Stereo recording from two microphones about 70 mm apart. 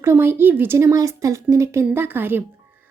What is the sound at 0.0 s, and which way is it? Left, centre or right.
Speech, right.